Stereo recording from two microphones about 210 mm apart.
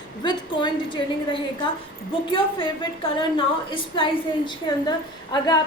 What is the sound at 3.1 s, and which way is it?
Speech, 25° left (ahead or behind).